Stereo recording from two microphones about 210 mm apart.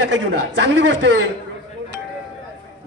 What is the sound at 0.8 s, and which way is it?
Speech, 65° right (ahead or behind).